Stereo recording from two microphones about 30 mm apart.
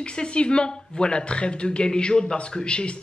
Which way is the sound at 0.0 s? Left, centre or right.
Left.